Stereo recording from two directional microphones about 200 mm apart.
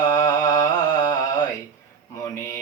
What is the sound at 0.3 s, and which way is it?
Music, 20° left (ahead or behind).